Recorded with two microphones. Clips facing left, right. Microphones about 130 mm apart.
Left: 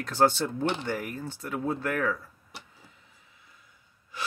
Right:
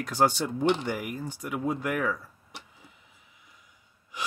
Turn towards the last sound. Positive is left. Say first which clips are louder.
# right 1 dB
turn(degrees=-15)  # may be behind; listen again after turning